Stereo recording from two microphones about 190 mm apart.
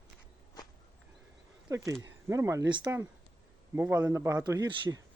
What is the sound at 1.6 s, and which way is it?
Speech, 15° right (ahead or behind).